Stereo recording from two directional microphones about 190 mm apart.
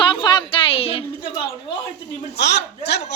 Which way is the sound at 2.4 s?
60° left (ahead or behind).